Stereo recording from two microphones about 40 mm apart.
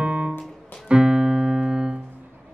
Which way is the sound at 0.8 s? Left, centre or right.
Right.